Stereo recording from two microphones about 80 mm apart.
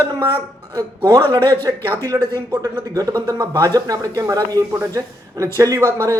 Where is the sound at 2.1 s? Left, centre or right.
Right.